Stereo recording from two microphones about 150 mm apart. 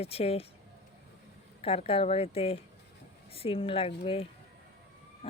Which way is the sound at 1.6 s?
40° left (ahead or behind).